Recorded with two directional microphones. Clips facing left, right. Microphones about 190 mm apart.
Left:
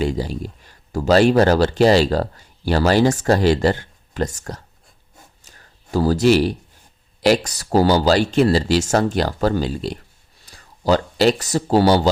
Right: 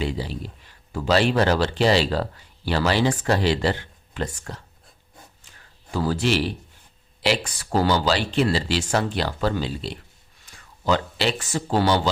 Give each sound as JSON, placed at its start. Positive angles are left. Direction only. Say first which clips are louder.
{"t": 0.0, "sound": "speech", "louder": "left 5 dB", "side_deg": 45}
{"t": 5.4, "sound": "a sound", "louder": "left 3 dB", "side_deg": 40}
{"t": 7.2, "sound": "speech", "louder": "left 7 dB", "side_deg": 40}